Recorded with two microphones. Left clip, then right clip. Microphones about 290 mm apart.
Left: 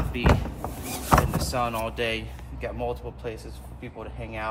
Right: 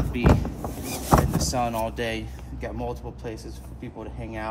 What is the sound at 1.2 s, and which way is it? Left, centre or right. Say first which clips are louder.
Speech: right 1 dB; centre.